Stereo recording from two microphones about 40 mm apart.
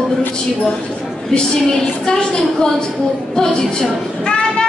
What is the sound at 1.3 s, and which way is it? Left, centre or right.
A woman's voice, centre.